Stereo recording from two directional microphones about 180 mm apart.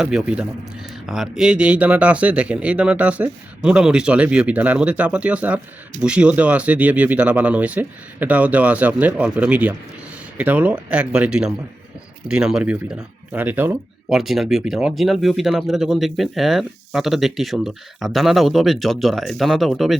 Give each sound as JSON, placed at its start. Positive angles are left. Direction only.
{"t": 0.0, "sound": "speech", "side_deg": 0}